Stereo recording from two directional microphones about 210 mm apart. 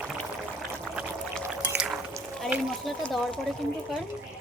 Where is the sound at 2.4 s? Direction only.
Centre (ahead or behind).